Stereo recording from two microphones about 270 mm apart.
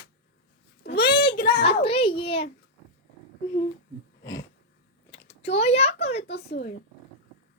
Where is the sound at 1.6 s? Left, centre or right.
Left.